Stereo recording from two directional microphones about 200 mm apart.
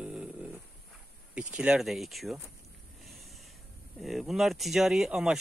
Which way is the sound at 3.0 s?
Centre (ahead or behind).